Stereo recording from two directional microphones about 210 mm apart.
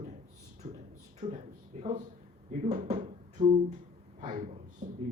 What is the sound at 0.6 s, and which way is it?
Speech, 25° right (ahead or behind).